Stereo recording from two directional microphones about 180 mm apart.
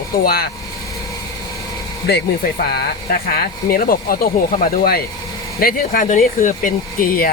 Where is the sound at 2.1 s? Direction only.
60° left (ahead or behind).